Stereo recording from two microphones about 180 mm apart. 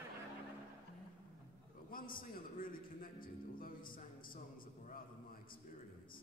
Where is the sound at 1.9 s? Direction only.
50° left (ahead or behind).